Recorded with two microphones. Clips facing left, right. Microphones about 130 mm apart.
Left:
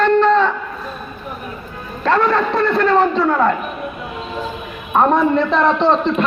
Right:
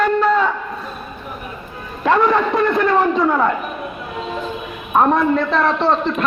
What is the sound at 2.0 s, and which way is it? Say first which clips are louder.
A man's voice: right 1 dB; 15° right (ahead or behind).